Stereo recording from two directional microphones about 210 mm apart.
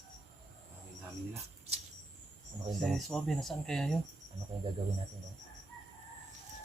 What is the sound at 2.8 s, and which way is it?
Speech, centre (ahead or behind).